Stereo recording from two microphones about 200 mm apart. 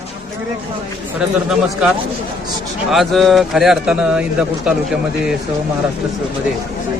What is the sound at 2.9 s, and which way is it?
A man's voice, centre (ahead or behind).